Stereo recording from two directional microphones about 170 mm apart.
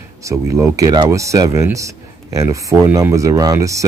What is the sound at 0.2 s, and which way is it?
Speech, 20° right (ahead or behind).